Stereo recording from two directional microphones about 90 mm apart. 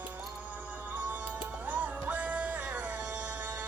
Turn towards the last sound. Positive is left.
turn(degrees=-15)  # may be behind; listen again after turning